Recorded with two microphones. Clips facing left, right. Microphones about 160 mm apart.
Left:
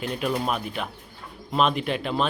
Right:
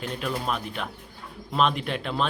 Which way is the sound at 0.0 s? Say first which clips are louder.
Left 3 dB; 5° left (ahead or behind).